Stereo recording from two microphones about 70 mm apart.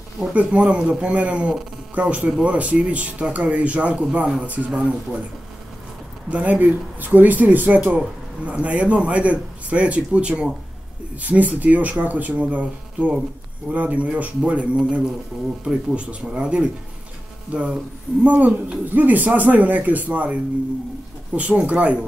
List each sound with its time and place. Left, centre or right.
0.3 s speech: centre
6.3 s speech: right